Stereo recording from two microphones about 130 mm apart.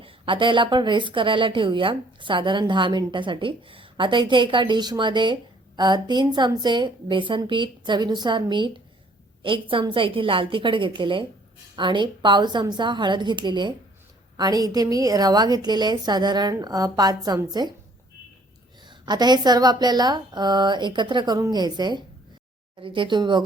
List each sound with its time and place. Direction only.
0.0 s a woman's voice: 40° right (ahead or behind)
18.9 s a woman's voice: 35° right (ahead or behind)